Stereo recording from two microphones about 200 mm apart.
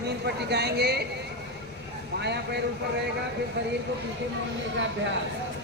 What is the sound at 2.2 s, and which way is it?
Speech, 55° right (ahead or behind).